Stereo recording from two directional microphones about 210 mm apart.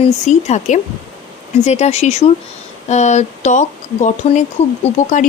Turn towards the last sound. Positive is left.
turn(degrees=30)  # may be behind; listen again after turning